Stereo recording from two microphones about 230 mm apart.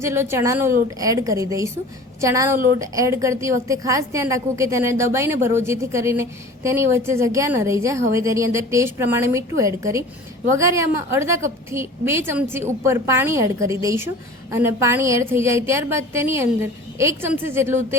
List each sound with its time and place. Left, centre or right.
0.0 s a woman's voice: centre